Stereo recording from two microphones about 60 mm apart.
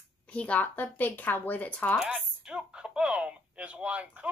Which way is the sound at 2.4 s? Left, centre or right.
Centre.